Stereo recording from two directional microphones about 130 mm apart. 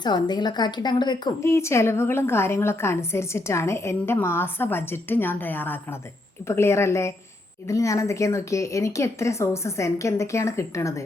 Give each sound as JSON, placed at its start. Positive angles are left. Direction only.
{"t": 0.0, "sound": "a woman's voice", "side_deg": 35}
{"t": 1.4, "sound": "a woman's voice", "side_deg": 20}